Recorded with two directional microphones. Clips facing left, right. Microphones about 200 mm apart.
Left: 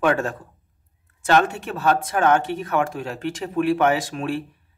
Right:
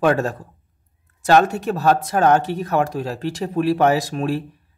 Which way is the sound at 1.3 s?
40° right (ahead or behind).